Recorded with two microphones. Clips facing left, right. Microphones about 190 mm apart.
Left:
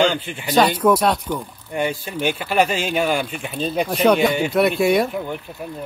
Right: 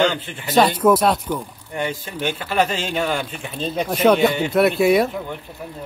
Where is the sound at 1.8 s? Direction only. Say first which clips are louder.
Left 2 dB; 15° left (ahead or behind).